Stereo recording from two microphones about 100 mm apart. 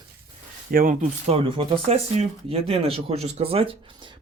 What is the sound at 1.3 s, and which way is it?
Speech, 80° right.